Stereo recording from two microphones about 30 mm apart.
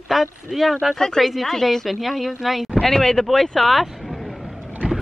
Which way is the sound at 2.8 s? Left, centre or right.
Centre.